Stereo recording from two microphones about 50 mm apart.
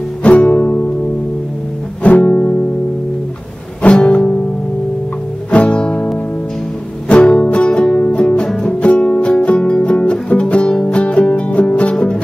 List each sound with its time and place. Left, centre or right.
0.2 s music: left
2.0 s music: left
3.8 s music: left
5.5 s music: left
7.1 s music: left